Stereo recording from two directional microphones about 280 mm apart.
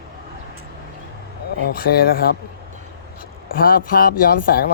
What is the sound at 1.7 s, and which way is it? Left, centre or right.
Speech, left.